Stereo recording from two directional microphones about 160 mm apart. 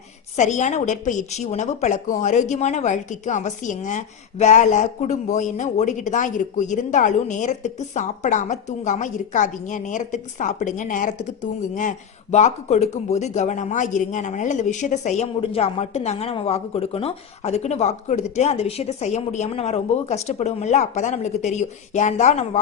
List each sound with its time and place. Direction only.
0.3 s a woman's voice: 50° left (ahead or behind)